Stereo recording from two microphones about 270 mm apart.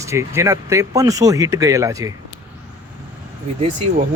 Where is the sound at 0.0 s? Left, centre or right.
Centre.